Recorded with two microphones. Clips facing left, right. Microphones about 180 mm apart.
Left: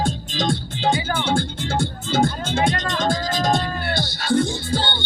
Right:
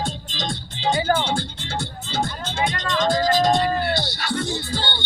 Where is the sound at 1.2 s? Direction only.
50° left (ahead or behind).